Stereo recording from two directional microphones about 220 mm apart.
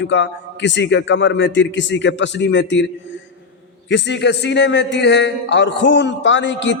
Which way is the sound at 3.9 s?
55° left (ahead or behind).